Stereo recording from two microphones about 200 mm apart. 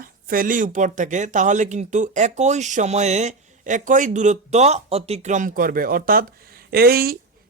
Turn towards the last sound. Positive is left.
turn(degrees=-50)  # may be behind; listen again after turning